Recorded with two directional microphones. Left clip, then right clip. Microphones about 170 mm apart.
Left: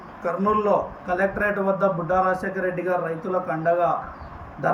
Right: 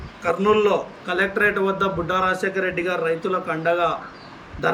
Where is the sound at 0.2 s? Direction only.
15° right (ahead or behind).